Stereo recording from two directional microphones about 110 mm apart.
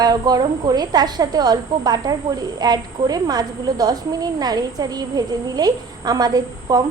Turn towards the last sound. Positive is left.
turn(degrees=-35)  # may be behind; listen again after turning